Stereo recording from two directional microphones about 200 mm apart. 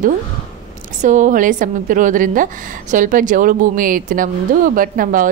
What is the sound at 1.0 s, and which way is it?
A woman's voice, 40° right (ahead or behind).